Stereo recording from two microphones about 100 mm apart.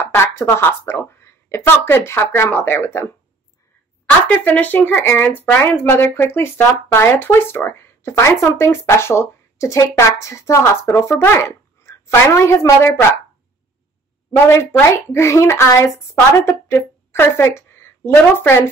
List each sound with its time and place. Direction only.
0.1 s speech: 25° left (ahead or behind)
14.3 s a woman's voice: 25° left (ahead or behind)